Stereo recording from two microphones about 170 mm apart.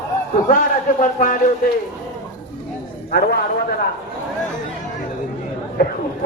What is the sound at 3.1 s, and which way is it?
Speech, 65° left (ahead or behind).